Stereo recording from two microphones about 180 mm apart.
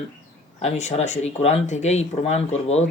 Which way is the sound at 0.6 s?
40° left (ahead or behind).